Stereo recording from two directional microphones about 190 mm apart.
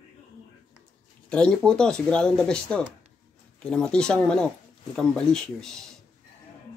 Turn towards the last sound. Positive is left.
turn(degrees=5)  # may be behind; listen again after turning